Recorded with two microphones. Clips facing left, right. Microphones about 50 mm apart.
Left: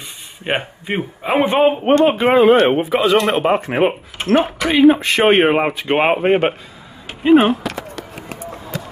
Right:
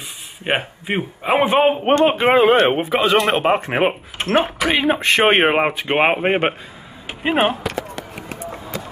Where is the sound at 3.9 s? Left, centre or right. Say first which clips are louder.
Left 3 dB; centre.